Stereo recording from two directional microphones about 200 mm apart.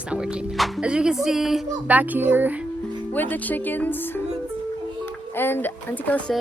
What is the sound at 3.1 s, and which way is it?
Speech, 10° left (ahead or behind).